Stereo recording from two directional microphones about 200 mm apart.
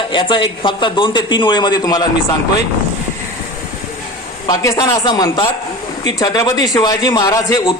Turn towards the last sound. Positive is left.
turn(degrees=20)  # may be behind; listen again after turning